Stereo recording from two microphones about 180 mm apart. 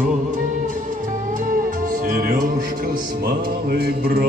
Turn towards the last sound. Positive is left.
turn(degrees=-60)  # may be behind; listen again after turning